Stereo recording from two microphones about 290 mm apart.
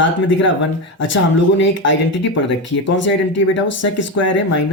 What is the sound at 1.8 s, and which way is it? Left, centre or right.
Speech, left.